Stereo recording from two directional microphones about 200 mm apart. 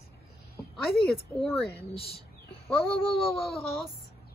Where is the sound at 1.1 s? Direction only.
Centre (ahead or behind).